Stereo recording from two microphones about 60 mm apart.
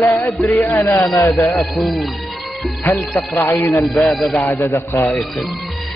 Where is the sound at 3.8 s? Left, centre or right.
Centre.